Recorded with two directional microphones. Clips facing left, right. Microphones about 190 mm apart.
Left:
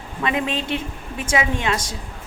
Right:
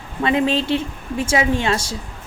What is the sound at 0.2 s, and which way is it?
A woman's voice, 30° right (ahead or behind).